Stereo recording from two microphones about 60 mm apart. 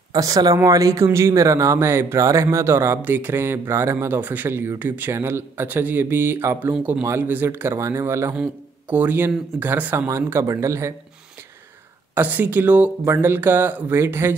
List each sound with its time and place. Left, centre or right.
0.1 s speech: right
0.7 s speech: right
1.0 s speech: right
1.9 s speech: right
2.1 s speech: right
3.0 s speech: right
4.1 s a man's voice: right
7.8 s speech: right
8.9 s a man's voice: right
9.9 s speech: right
12.2 s speech: right
13.0 s a man's voice: right
13.9 s speech: right